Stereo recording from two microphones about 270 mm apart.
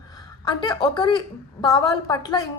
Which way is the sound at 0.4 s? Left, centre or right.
Centre.